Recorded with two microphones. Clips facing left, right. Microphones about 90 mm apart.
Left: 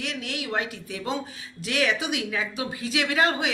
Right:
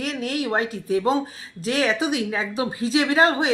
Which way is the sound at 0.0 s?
40° right (ahead or behind).